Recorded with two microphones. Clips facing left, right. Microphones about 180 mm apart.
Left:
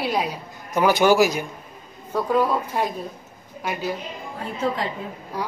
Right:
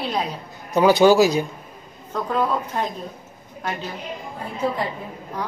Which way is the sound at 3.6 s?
10° left (ahead or behind).